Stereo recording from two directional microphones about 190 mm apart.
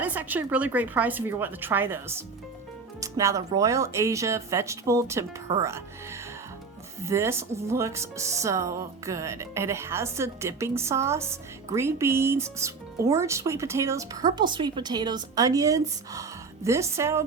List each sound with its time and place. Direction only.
0.0 s speech: 10° right (ahead or behind)